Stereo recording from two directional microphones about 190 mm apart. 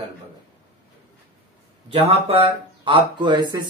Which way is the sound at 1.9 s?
30° right (ahead or behind).